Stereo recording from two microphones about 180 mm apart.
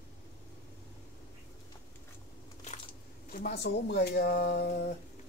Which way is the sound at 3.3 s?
55° left (ahead or behind).